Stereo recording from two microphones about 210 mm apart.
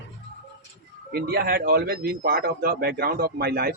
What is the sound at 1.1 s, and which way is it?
A man's voice, 50° right (ahead or behind).